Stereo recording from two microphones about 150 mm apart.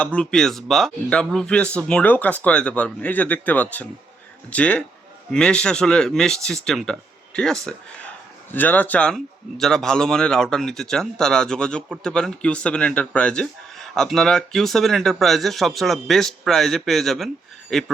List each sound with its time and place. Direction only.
0.0 s a man's voice: 10° left (ahead or behind)